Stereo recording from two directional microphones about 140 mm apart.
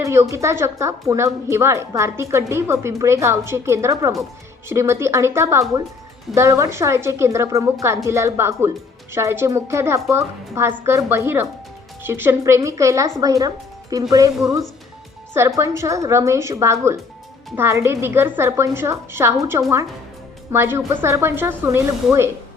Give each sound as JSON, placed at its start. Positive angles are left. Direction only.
{"t": 0.0, "sound": "a woman's voice", "side_deg": -20}